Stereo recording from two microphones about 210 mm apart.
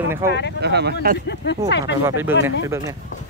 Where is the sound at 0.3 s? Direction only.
55° left (ahead or behind).